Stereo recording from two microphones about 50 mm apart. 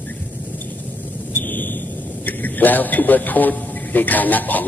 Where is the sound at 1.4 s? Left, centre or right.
Left.